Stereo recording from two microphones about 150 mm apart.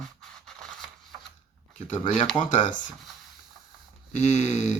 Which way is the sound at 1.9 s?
55° left (ahead or behind).